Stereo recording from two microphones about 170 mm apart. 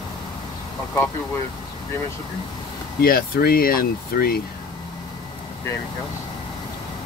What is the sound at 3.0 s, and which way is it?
Speech, 60° left (ahead or behind).